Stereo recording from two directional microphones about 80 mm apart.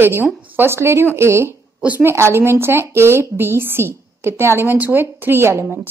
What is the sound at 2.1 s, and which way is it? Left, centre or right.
A woman's voice, right.